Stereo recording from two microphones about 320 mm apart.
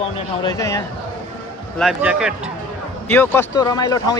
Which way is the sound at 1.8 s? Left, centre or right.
Centre.